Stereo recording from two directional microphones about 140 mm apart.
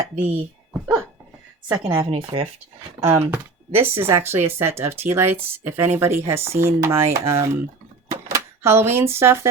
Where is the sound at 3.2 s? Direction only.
15° right (ahead or behind).